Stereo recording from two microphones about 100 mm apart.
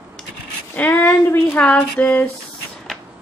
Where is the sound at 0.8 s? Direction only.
20° left (ahead or behind).